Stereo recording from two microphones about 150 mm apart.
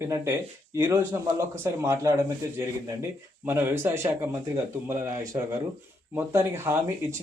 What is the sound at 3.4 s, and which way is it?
Speech, 15° right (ahead or behind).